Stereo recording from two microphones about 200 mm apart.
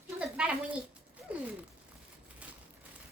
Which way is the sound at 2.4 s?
5° right (ahead or behind).